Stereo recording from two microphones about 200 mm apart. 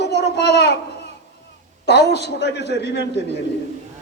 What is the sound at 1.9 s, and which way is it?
A woman's voice, 55° left (ahead or behind).